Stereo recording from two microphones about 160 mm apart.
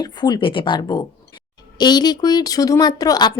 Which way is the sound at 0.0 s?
25° left (ahead or behind).